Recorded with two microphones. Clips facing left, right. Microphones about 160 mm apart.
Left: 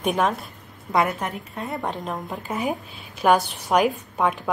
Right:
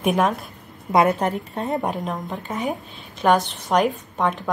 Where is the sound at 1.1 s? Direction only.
35° right (ahead or behind).